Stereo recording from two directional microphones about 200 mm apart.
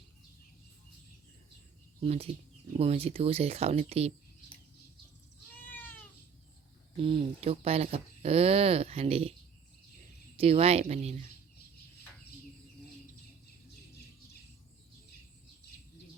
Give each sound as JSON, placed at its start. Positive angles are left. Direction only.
{"t": 2.0, "sound": "speech", "side_deg": -30}
{"t": 6.9, "sound": "speech", "side_deg": -25}
{"t": 10.3, "sound": "speech", "side_deg": -30}